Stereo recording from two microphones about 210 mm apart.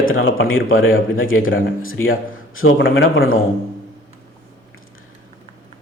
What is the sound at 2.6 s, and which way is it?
Speech, 65° left (ahead or behind).